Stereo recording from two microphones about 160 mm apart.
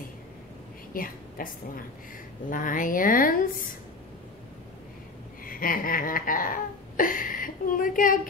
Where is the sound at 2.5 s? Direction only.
55° left (ahead or behind).